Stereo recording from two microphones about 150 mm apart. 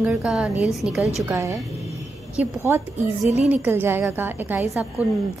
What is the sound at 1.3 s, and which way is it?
Speech, 15° right (ahead or behind).